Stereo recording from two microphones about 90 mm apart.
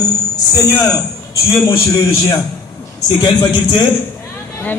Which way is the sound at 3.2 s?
50° left (ahead or behind).